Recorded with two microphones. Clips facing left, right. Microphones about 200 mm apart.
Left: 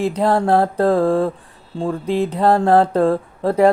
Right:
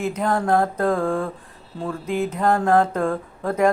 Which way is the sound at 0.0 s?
35° left (ahead or behind).